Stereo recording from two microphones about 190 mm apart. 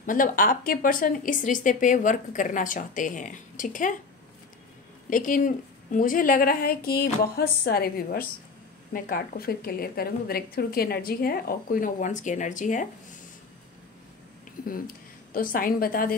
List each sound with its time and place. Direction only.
0.0 s speech: 45° left (ahead or behind)
5.1 s speech: 45° left (ahead or behind)
15.3 s speech: 45° left (ahead or behind)